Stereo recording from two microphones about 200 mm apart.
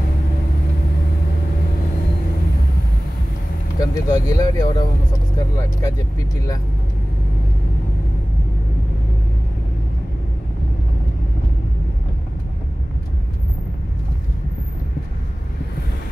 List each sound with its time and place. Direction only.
3.8 s speech: 20° left (ahead or behind)